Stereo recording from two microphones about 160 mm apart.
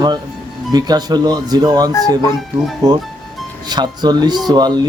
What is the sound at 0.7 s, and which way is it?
Speech, 25° right (ahead or behind).